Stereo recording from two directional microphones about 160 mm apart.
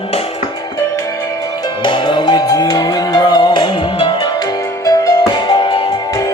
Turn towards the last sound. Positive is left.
turn(degrees=30)  # may be behind; listen again after turning